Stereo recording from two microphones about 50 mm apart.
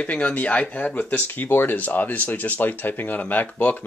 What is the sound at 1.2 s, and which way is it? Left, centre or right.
Speech, left.